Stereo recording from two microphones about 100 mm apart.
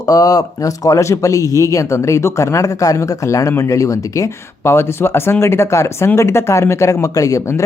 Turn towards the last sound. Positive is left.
turn(degrees=30)  # may be behind; listen again after turning